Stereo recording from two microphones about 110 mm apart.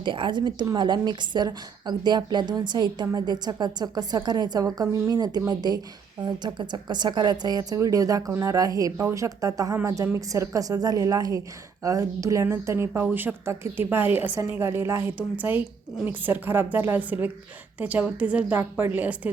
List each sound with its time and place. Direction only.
0.0 s a woman's voice: 45° right (ahead or behind); by 19.3 s 15° right (ahead or behind)